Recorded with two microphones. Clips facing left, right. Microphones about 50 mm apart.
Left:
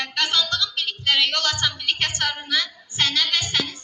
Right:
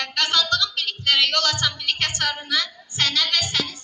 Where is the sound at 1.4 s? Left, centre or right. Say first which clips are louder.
Even; left.